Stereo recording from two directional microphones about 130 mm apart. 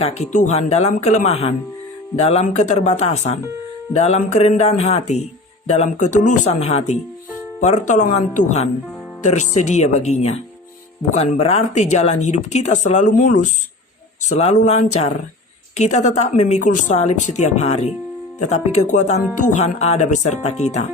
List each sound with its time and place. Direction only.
0.0 s speech: 55° left (ahead or behind); by 13.5 s 70° left (ahead or behind)
14.3 s speech: 60° left (ahead or behind)